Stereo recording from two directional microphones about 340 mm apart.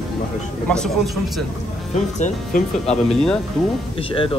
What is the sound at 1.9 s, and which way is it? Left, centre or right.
Speech, left.